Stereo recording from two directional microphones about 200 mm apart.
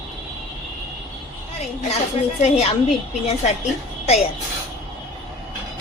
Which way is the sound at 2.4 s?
30° left (ahead or behind).